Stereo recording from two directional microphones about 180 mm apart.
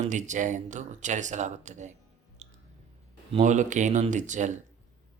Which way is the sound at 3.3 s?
45° right (ahead or behind).